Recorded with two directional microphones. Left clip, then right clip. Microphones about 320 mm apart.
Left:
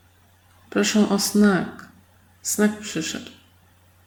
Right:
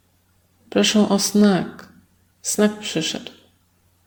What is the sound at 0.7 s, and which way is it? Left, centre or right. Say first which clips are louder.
A woman's voice: right 3 dB; centre.